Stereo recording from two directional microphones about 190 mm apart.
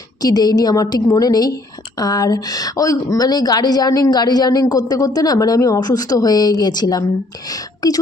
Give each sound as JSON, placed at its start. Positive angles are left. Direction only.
{"t": 0.2, "sound": "a woman's voice", "side_deg": 20}